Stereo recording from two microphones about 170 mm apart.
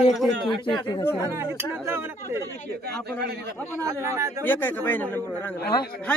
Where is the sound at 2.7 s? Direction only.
70° right (ahead or behind).